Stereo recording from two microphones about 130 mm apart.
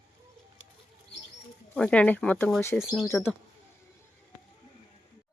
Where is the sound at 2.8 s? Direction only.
5° right (ahead or behind).